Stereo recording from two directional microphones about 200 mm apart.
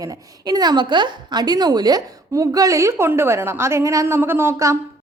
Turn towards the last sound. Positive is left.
turn(degrees=-15)  # may be behind; listen again after turning